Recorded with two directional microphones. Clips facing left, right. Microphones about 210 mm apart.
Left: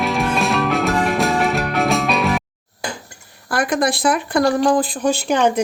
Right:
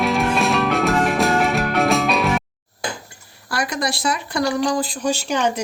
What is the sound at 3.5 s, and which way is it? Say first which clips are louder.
Speech: left 5 dB; 55° left (ahead or behind).